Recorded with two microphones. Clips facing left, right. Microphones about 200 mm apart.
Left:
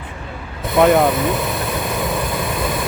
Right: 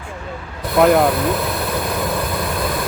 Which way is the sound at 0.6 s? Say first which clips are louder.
Even; centre (ahead or behind).